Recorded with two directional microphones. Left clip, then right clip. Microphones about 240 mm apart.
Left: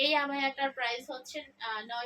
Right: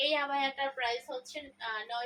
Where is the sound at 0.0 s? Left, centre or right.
Left.